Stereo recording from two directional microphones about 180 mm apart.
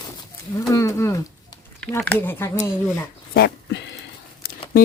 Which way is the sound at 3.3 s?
70° left (ahead or behind).